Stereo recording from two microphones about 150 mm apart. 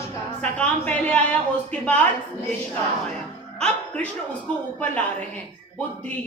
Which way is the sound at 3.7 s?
10° left (ahead or behind).